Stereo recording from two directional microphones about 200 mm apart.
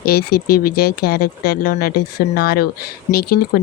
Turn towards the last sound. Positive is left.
turn(degrees=50)  # may be behind; listen again after turning